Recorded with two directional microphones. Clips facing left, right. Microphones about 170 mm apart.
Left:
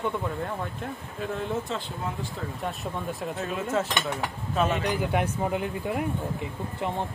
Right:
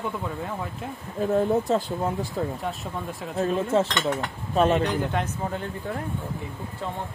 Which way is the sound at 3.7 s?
30° right (ahead or behind).